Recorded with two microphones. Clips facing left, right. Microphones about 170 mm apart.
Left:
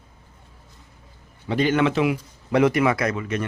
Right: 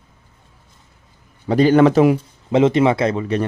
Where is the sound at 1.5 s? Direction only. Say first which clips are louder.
Right 8 dB; 35° right (ahead or behind).